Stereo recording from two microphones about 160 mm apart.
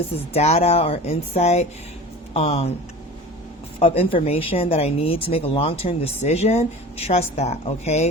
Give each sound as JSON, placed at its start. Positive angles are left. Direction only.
{"t": 0.3, "sound": "speech", "side_deg": 40}
{"t": 3.8, "sound": "speech", "side_deg": 35}